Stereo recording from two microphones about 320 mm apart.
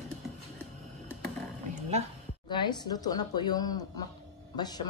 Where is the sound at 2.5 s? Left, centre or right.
Centre.